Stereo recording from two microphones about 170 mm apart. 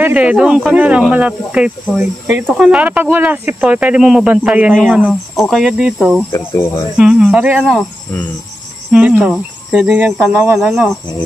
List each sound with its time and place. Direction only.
0.0 s speech: 10° right (ahead or behind)
6.3 s speech: 20° left (ahead or behind)
7.0 s speech: 5° right (ahead or behind)
8.9 s speech: 5° right (ahead or behind)